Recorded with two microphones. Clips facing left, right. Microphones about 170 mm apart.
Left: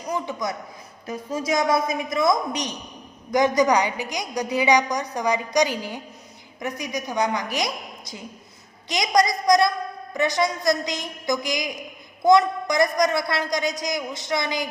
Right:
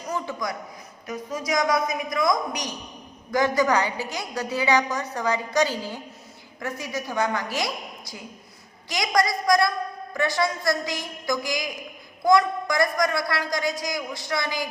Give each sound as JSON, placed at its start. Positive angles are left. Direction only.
{"t": 0.0, "sound": "a woman's voice", "side_deg": 15}